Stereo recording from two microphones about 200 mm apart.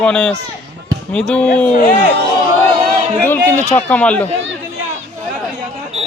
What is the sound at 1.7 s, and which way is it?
Speech, 40° left (ahead or behind).